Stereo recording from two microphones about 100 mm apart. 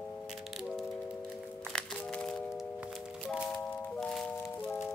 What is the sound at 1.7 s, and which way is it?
Music, 5° left (ahead or behind).